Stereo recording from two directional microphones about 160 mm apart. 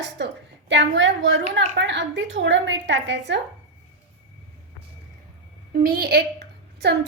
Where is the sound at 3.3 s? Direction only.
90° right.